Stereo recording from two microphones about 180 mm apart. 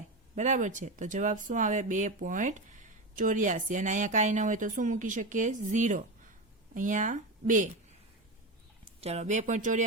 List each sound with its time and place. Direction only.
0.3 s speech: 40° right (ahead or behind)
9.0 s speech: 35° right (ahead or behind)